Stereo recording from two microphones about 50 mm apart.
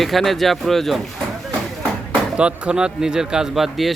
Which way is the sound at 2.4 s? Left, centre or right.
Centre.